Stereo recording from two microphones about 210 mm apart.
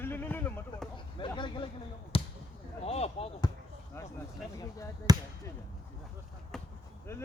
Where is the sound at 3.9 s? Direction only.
10° left (ahead or behind).